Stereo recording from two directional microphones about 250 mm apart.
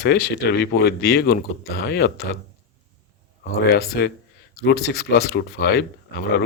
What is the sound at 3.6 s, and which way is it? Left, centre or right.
Speech, left.